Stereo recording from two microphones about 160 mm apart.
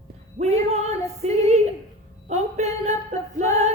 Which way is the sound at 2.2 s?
45° right (ahead or behind).